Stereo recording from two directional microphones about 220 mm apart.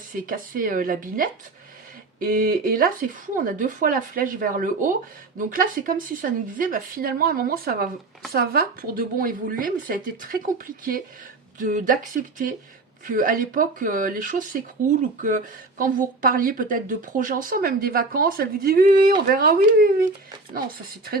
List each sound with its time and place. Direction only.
0.3 s speech: 40° right (ahead or behind)